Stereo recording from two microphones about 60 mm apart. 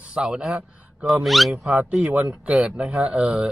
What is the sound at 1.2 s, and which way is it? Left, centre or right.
Speech, centre.